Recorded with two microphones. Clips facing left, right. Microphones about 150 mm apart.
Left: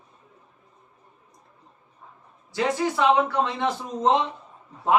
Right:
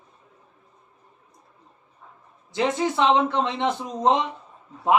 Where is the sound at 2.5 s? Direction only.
20° right (ahead or behind).